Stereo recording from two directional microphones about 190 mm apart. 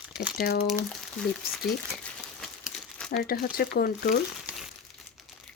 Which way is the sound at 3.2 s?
50° left (ahead or behind).